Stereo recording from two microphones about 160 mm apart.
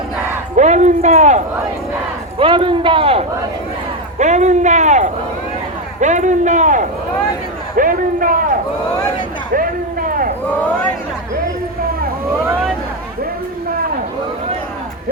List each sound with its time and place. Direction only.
0.5 s a man's voice: 45° right (ahead or behind)
2.4 s a man's voice: 30° right (ahead or behind)
4.2 s a man's voice: 45° right (ahead or behind)